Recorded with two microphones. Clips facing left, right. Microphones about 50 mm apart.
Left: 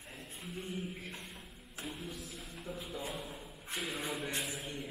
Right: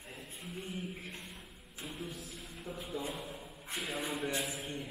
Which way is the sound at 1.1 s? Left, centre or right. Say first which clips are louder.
Even; centre.